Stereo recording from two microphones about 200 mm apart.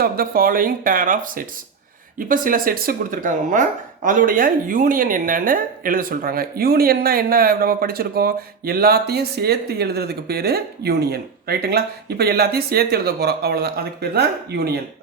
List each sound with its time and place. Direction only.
0.0 s speech: 45° right (ahead or behind)